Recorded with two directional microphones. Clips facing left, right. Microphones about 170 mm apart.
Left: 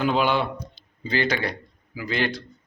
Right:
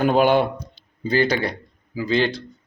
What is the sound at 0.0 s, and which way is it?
A man's voice, 50° right (ahead or behind).